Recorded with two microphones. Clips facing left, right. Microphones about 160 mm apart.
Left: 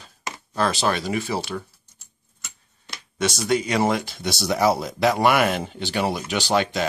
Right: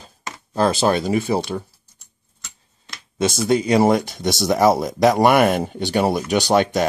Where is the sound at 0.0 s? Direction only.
30° right (ahead or behind).